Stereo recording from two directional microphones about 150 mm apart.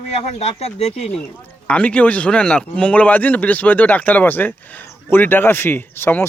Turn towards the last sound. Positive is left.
turn(degrees=15)  # may be behind; listen again after turning